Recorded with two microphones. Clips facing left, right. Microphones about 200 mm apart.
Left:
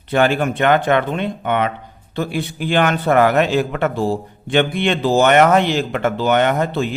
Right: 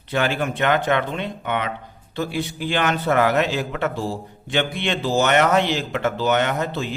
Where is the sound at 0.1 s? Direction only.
55° left (ahead or behind).